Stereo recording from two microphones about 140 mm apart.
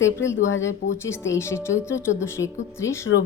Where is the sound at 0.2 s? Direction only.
20° left (ahead or behind).